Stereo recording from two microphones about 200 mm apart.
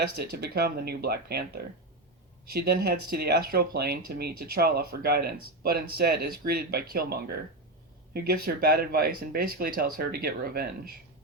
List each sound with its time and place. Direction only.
0.0 s speech: 50° right (ahead or behind)